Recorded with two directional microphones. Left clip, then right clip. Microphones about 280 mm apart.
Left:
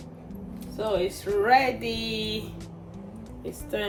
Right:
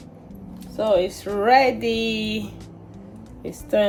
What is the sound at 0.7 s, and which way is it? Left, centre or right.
Speech, right.